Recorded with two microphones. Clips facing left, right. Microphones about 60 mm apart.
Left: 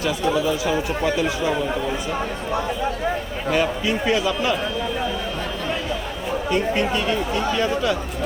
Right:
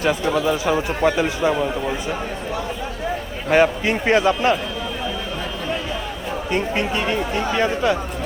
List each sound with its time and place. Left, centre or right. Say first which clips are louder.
0.0 s speech: right 2 dB; right
3.5 s speech: right 5 dB; right
6.5 s speech: left 1 dB; right